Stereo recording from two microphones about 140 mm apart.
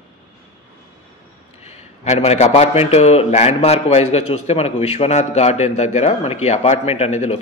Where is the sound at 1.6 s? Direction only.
50° left (ahead or behind).